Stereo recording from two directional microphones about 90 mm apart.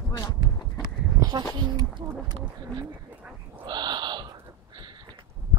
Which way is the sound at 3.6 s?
50° right (ahead or behind).